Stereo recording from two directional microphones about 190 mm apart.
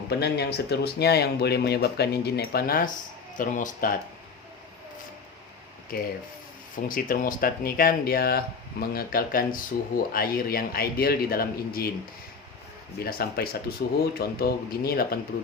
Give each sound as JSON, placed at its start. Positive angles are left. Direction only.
{"t": 0.1, "sound": "speech", "side_deg": 60}
{"t": 5.9, "sound": "speech", "side_deg": 50}
{"t": 13.1, "sound": "speech", "side_deg": 55}